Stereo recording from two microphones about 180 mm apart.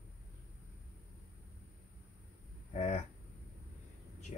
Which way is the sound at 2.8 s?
40° left (ahead or behind).